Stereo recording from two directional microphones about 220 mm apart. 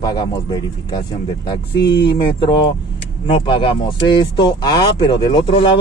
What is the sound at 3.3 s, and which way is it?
Speech, 25° left (ahead or behind).